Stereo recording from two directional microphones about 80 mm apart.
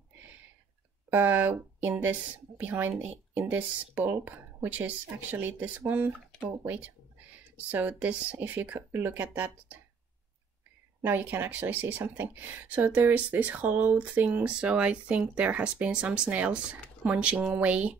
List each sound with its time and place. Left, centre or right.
1.1 s speech: right
11.0 s speech: right